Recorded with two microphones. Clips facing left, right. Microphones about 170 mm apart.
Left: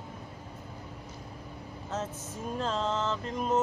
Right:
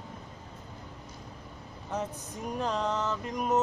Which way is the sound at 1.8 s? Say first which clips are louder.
Right 1 dB; 15° right (ahead or behind).